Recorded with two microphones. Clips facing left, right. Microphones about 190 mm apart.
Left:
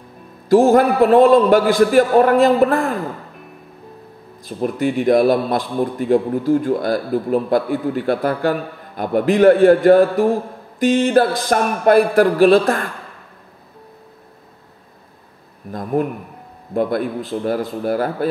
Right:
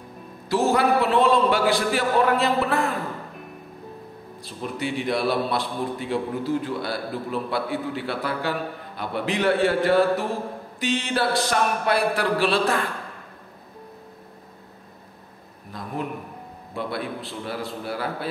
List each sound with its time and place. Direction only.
0.5 s a man's voice: 50° left (ahead or behind)
4.4 s a man's voice: 50° left (ahead or behind)
16.0 s a man's voice: 55° left (ahead or behind)